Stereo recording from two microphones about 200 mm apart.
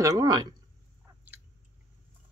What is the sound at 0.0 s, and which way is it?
Speech, 15° right (ahead or behind).